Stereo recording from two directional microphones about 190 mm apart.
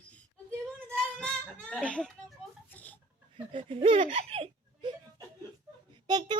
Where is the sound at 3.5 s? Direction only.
30° right (ahead or behind).